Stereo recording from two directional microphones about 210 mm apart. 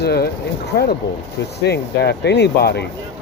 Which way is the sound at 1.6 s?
50° left (ahead or behind).